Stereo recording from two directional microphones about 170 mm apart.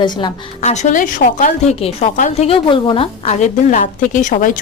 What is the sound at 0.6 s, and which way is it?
Speech, 45° left (ahead or behind).